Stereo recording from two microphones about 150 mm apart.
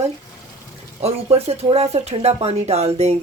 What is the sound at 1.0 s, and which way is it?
Speech, 45° right (ahead or behind).